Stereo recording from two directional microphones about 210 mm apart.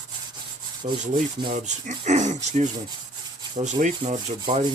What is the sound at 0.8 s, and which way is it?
Rub, 30° right (ahead or behind).